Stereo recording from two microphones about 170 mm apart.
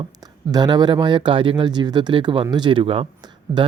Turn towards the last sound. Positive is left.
turn(degrees=-30)  # may be behind; listen again after turning